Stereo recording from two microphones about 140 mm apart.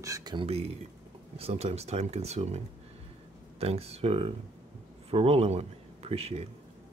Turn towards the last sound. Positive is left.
turn(degrees=-45)  # may be behind; listen again after turning